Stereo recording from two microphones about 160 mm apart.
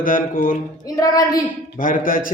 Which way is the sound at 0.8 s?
20° left (ahead or behind).